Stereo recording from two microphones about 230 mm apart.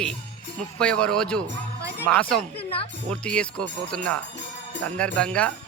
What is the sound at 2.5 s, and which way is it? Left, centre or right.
Music, left.